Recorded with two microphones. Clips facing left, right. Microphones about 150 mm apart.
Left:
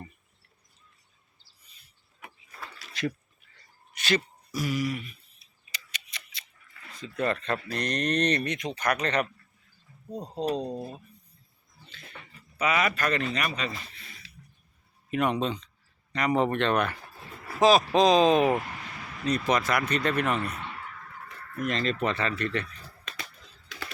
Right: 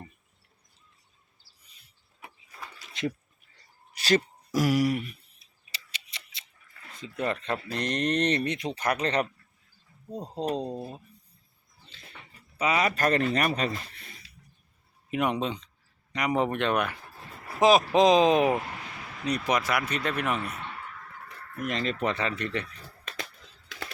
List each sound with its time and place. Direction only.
3.9 s speech: 35° right (ahead or behind)
4.5 s a sound: 85° right; by 5.5 s 60° right (ahead or behind)
5.7 s scissors: 30° right (ahead or behind)
6.9 s speech: 20° right (ahead or behind)
10.6 s speech: 10° right (ahead or behind)
12.5 s speech: 30° right (ahead or behind); by 14.3 s 45° right (ahead or behind)
15.1 s speech: 15° right (ahead or behind)
17.6 s speech: 20° right (ahead or behind)
21.6 s speech: 15° right (ahead or behind)